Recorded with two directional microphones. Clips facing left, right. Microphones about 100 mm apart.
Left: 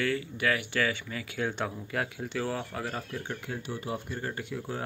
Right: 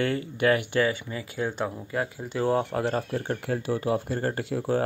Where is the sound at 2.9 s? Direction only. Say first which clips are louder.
Right 8 dB; 40° right (ahead or behind); by 4.8 s 60° right (ahead or behind).